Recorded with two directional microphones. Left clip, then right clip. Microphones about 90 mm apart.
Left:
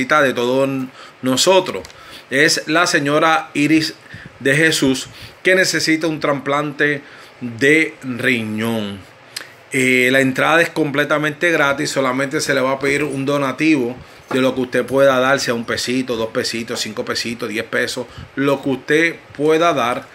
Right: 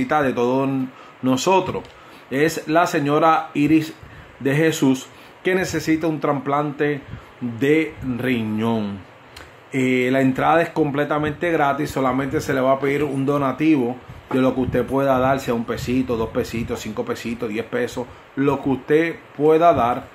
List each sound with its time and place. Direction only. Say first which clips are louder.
0.0 s speech: left 4 dB; 25° right (ahead or behind)
2.3 s speech: left 4 dB; 30° right (ahead or behind)
11.7 s speech: left 3 dB; 40° right (ahead or behind)